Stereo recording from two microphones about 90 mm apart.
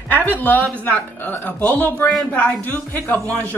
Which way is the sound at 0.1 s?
20° left (ahead or behind).